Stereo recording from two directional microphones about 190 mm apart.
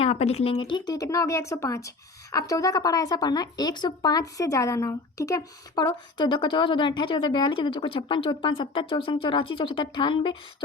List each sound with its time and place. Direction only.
0.0 s speech: 35° left (ahead or behind)